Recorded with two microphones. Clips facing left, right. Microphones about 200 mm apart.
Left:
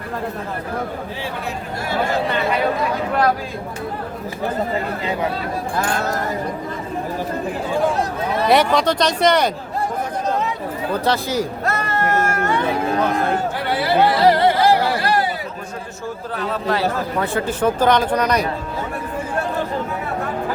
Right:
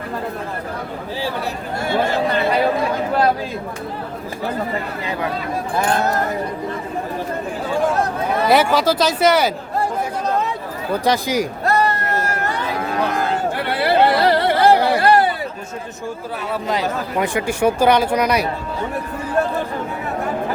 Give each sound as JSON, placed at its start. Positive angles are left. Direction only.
{"t": 8.4, "sound": "speech", "side_deg": -5}
{"t": 11.0, "sound": "speech", "side_deg": -15}
{"t": 11.6, "sound": "a sound", "side_deg": -35}
{"t": 13.6, "sound": "chatter", "side_deg": -60}
{"t": 16.5, "sound": "speech", "side_deg": -15}